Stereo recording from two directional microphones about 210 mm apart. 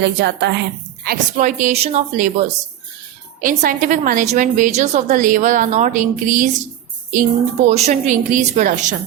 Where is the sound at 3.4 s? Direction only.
40° right (ahead or behind).